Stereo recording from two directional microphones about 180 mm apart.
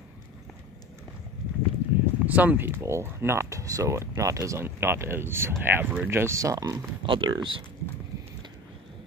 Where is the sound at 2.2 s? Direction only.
10° right (ahead or behind); by 7.6 s 25° right (ahead or behind).